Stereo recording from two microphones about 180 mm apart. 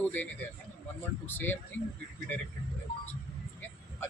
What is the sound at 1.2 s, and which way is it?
Speech, 10° left (ahead or behind).